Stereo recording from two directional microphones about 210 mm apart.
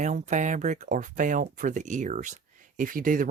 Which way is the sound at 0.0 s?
35° right (ahead or behind).